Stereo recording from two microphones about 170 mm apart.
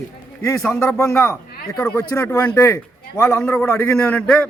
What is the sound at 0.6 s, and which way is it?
Speech, 5° left (ahead or behind).